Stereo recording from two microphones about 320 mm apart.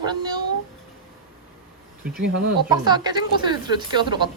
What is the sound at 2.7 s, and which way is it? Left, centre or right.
Speech, centre.